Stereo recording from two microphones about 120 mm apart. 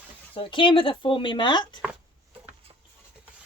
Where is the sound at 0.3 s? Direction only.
45° left (ahead or behind).